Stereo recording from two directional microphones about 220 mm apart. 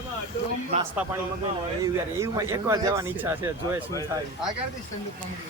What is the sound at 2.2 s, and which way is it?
Speech, 10° right (ahead or behind).